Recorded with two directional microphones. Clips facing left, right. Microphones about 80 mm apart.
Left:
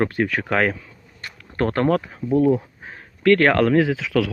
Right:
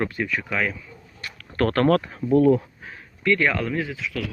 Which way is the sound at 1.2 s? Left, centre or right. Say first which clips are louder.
Even; left.